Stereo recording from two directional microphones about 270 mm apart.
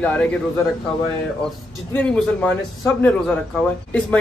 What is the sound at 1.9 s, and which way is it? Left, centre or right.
Speech, centre.